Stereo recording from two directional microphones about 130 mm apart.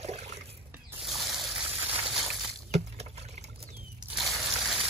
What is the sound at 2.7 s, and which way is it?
Rowboat, 55° right (ahead or behind).